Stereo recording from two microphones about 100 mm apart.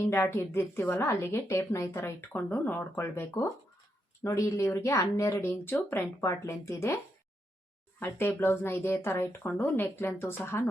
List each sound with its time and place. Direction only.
0.0 s a woman's voice: 25° left (ahead or behind)
7.9 s a woman's voice: 20° left (ahead or behind)